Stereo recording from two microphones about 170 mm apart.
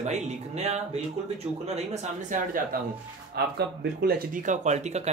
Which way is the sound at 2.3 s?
55° right (ahead or behind).